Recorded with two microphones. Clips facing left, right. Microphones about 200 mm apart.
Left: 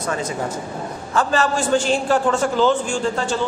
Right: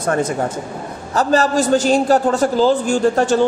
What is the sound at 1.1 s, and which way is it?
A man's voice, 40° right (ahead or behind).